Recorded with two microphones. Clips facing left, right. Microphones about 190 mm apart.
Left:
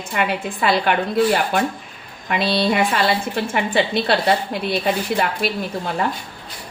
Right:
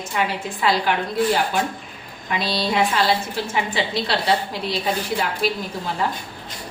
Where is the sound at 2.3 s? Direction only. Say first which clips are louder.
Left 4 dB; 60° left (ahead or behind).